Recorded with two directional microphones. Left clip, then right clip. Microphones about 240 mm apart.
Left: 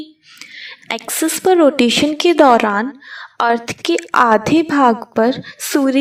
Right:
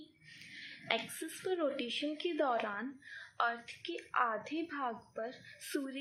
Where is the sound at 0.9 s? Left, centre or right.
Left.